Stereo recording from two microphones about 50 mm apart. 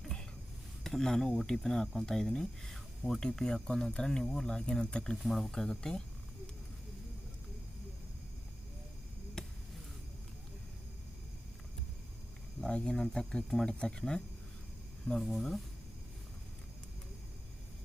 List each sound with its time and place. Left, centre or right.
0.0 s a sound: centre
0.9 s speech: centre
5.1 s speech: centre
9.4 s basketball bounce: centre
12.6 s speech: centre
15.3 s speech: centre